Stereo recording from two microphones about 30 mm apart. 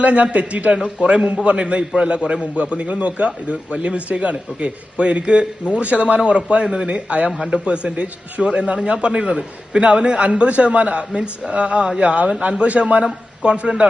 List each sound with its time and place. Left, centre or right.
0.0 s a man's voice: right
7.3 s a man's voice: centre
7.5 s a man's voice: right
11.1 s a man's voice: right